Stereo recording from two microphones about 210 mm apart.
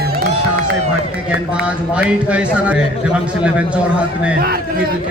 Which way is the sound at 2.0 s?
5° right (ahead or behind).